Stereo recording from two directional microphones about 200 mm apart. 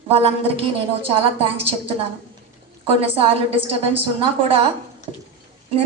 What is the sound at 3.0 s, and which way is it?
A woman's voice, 30° right (ahead or behind).